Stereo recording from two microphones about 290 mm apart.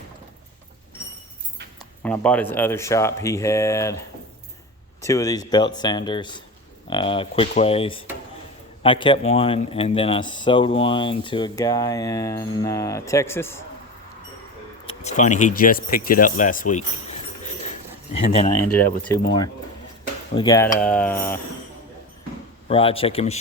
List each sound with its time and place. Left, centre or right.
1.8 s speech: centre
14.8 s speech: left
18.1 s speech: left
18.8 s speech: centre
20.3 s speech: centre
22.7 s speech: centre